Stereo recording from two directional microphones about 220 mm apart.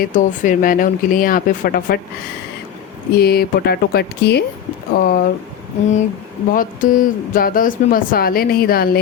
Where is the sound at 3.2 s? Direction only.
45° left (ahead or behind).